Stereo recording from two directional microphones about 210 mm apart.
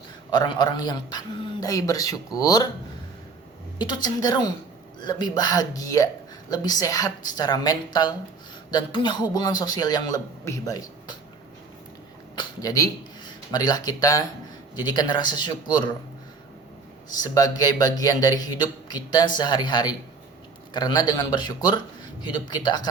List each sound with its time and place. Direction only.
0.3 s a man's voice: 20° left (ahead or behind)
3.8 s a man's voice: 20° left (ahead or behind)
12.4 s a man's voice: 15° left (ahead or behind)
17.1 s a man's voice: 20° left (ahead or behind)